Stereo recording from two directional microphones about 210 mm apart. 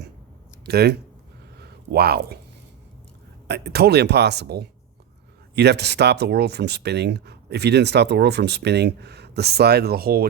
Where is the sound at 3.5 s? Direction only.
55° right (ahead or behind).